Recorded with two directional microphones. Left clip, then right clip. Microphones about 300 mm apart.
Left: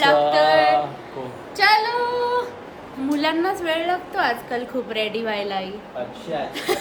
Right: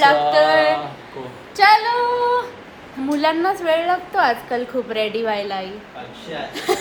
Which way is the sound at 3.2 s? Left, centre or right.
Centre.